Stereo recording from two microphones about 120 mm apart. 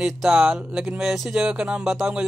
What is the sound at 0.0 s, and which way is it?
Speech, centre (ahead or behind).